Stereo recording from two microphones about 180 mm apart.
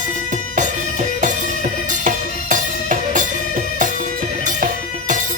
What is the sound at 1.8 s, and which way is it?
Music, 45° right (ahead or behind).